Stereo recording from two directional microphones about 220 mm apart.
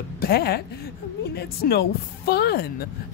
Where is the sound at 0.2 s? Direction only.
45° left (ahead or behind).